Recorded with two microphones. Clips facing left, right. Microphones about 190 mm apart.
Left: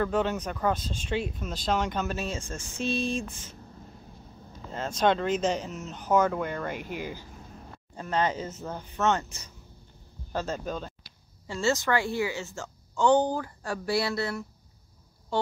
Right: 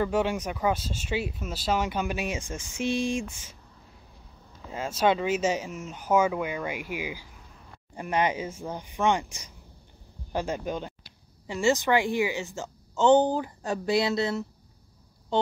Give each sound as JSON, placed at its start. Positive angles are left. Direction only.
{"t": 0.0, "sound": "speech", "side_deg": -10}
{"t": 4.6, "sound": "speech", "side_deg": -10}